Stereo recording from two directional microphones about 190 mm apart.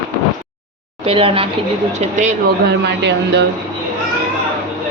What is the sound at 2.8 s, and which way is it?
Speech, 65° right (ahead or behind).